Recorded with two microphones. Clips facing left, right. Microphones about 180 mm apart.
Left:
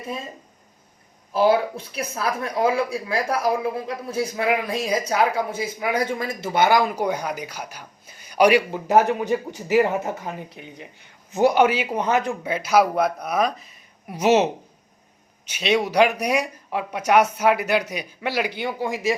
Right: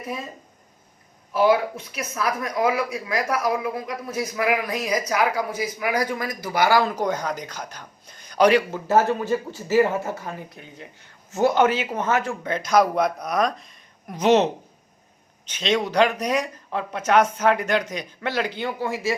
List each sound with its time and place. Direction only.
1.3 s speech: 30° left (ahead or behind)